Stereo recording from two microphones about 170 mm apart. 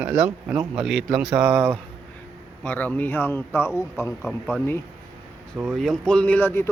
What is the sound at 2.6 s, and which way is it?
Speech, 10° left (ahead or behind).